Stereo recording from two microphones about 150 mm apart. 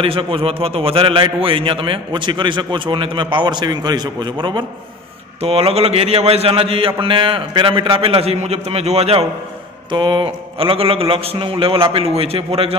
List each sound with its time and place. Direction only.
0.0 s a man's voice: 35° right (ahead or behind)
5.4 s a man's voice: 40° right (ahead or behind)
9.8 s a man's voice: 30° right (ahead or behind)